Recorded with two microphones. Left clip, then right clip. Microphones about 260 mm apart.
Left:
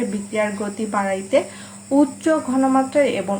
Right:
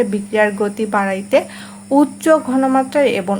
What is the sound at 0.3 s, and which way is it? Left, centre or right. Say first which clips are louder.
Speech: right 7 dB; right.